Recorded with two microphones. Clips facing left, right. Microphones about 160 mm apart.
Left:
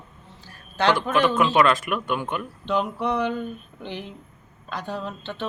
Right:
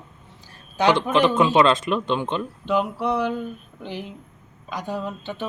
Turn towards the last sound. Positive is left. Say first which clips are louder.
# right 2 dB
turn(degrees=-10)  # may be behind; listen again after turning